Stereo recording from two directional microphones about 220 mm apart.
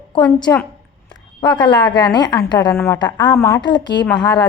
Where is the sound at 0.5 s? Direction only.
10° left (ahead or behind).